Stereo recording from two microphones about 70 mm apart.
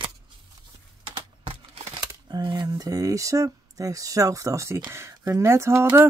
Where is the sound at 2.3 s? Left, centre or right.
Right.